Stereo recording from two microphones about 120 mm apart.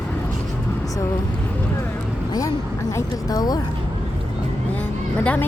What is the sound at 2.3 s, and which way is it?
A woman's voice, 30° left (ahead or behind).